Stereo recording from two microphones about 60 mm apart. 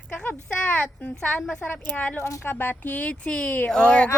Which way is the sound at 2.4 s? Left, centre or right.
Left.